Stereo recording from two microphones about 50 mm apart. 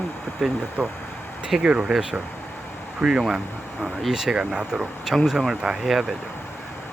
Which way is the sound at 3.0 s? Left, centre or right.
Centre.